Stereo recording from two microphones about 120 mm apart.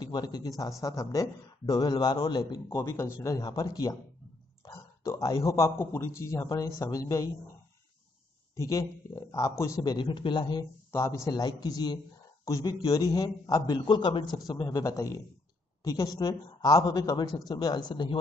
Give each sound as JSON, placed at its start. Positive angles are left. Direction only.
{"t": 0.0, "sound": "a man's voice", "side_deg": 35}
{"t": 2.7, "sound": "a man's voice", "side_deg": 25}
{"t": 8.5, "sound": "a man's voice", "side_deg": 25}
{"t": 9.9, "sound": "a man's voice", "side_deg": 40}
{"t": 10.9, "sound": "a man's voice", "side_deg": 25}